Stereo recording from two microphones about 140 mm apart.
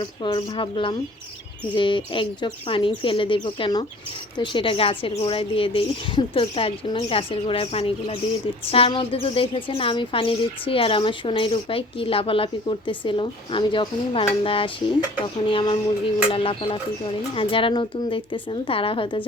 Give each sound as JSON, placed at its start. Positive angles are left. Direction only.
{"t": 0.0, "sound": "a woman's voice", "side_deg": 35}